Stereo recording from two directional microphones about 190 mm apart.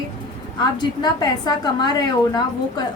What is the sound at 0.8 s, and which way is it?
Speech, 20° left (ahead or behind).